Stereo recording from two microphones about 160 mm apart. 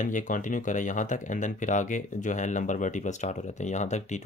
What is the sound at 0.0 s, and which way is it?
Speech, 50° left (ahead or behind).